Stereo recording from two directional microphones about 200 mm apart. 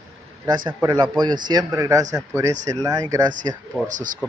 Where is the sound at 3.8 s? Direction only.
40° right (ahead or behind).